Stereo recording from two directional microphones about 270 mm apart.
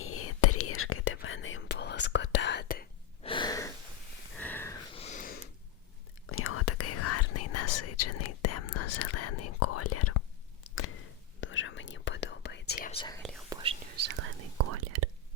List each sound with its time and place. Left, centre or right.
0.0 s whispering: left
3.2 s gasp: centre
4.4 s a sound: centre
4.9 s snort: left
6.2 s whispering: left
11.3 s whispering: left
12.7 s whispering: left
13.5 s whispering: centre
14.6 s whispering: right